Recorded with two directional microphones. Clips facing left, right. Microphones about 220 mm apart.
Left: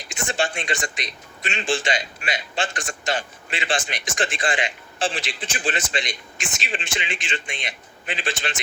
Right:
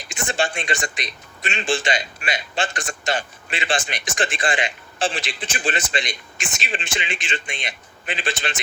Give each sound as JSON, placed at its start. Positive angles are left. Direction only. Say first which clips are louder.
{"t": 0.3, "sound": "a man's voice", "louder": "right 1 dB", "side_deg": -55}